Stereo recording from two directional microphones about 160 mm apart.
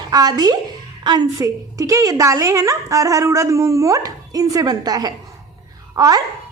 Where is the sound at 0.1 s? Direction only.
25° right (ahead or behind).